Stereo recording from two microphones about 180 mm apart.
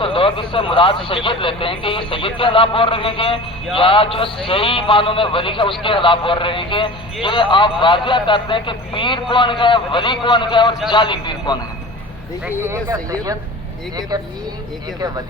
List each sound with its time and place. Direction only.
0.0 s a man's voice: 30° left (ahead or behind)
12.5 s speech: 15° right (ahead or behind)